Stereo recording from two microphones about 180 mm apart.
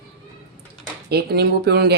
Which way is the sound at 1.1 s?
60° right (ahead or behind).